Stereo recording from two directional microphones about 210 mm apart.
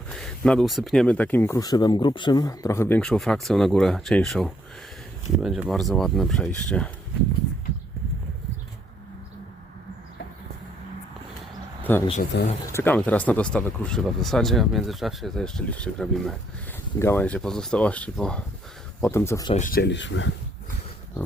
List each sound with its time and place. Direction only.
0.1 s speech: 5° left (ahead or behind)
11.8 s speech: 10° left (ahead or behind)
12.3 s speech: 50° left (ahead or behind)
12.7 s speech: 10° left (ahead or behind)
19.5 s speech: 40° left (ahead or behind); by 20.3 s 60° left (ahead or behind)